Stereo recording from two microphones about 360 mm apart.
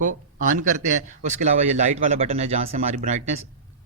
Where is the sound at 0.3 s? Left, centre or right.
Right.